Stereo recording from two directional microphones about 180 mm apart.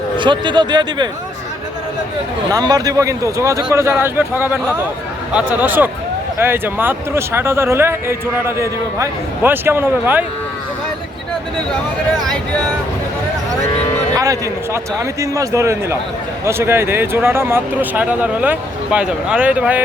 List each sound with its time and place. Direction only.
0.2 s speech: 25° right (ahead or behind)
2.5 s speech: 20° right (ahead or behind)
14.2 s speech: 20° right (ahead or behind)